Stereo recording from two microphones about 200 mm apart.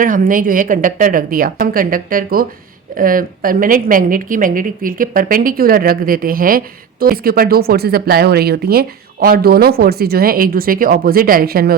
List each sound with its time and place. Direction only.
0.0 s speech: 45° right (ahead or behind)